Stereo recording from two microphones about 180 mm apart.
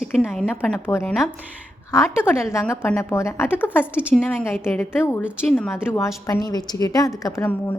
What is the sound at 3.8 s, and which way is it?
Speech, 5° right (ahead or behind).